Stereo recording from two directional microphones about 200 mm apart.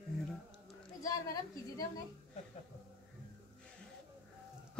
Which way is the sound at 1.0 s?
15° left (ahead or behind).